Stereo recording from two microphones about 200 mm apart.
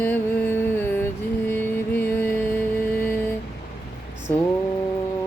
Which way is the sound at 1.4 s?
10° left (ahead or behind).